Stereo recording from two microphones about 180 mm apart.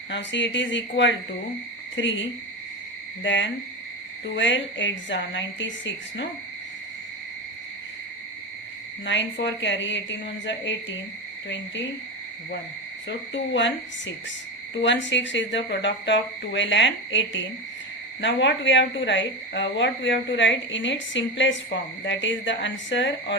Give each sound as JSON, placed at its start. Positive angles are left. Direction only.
{"t": 0.1, "sound": "speech", "side_deg": 85}
{"t": 3.2, "sound": "speech", "side_deg": 90}
{"t": 9.0, "sound": "speech", "side_deg": 90}
{"t": 13.1, "sound": "speech", "side_deg": 90}
{"t": 14.8, "sound": "speech", "side_deg": 90}